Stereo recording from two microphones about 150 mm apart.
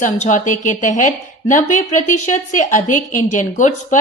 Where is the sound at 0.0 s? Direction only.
55° left (ahead or behind).